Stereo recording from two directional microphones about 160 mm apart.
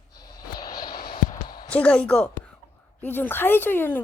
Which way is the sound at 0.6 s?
25° left (ahead or behind).